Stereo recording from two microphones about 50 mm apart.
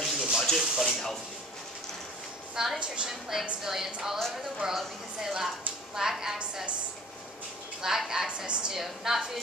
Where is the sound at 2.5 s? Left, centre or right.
Centre.